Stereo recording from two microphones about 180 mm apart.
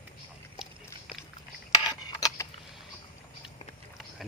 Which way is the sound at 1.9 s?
20° left (ahead or behind).